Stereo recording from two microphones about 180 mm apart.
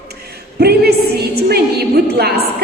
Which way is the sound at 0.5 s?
60° right (ahead or behind).